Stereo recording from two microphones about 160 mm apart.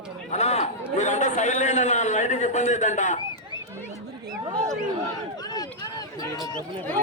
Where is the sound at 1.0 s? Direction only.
45° left (ahead or behind).